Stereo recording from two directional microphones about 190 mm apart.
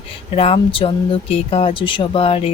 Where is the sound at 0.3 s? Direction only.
30° left (ahead or behind).